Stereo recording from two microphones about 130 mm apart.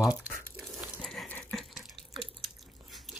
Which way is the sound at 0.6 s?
10° right (ahead or behind).